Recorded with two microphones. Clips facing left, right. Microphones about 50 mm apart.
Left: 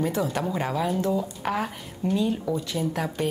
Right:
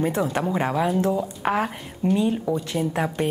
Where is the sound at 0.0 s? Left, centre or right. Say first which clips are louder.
Right 3 dB; right.